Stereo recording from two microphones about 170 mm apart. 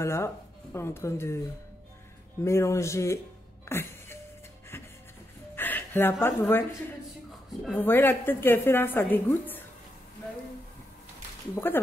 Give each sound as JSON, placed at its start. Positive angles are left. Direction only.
{"t": 0.0, "sound": "a woman's voice", "side_deg": 15}
{"t": 2.4, "sound": "a woman's voice", "side_deg": 15}
{"t": 3.6, "sound": "music", "side_deg": 15}
{"t": 5.6, "sound": "music", "side_deg": 10}
{"t": 6.2, "sound": "a woman's voice", "side_deg": 15}
{"t": 7.6, "sound": "a woman's voice", "side_deg": 10}
{"t": 11.5, "sound": "a woman's voice", "side_deg": 10}